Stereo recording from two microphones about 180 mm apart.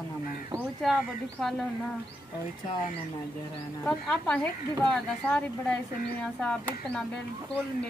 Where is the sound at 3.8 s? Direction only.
5° left (ahead or behind).